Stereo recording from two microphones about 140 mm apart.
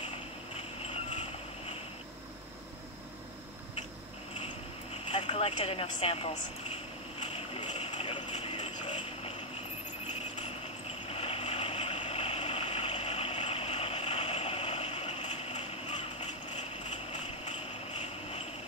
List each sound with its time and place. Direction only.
0.8 s vehicle: 45° left (ahead or behind)
5.0 s speech: 45° left (ahead or behind)
7.3 s a sound: 45° left (ahead or behind)
11.1 s vehicle: 45° left (ahead or behind)